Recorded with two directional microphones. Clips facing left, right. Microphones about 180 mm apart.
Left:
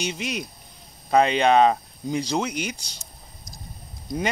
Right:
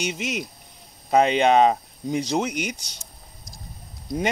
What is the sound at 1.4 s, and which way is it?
Speech, 15° right (ahead or behind).